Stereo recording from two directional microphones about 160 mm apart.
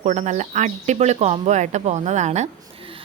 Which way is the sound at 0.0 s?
50° right (ahead or behind).